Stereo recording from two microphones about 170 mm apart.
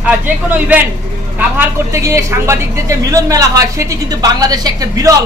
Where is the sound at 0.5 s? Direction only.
10° right (ahead or behind).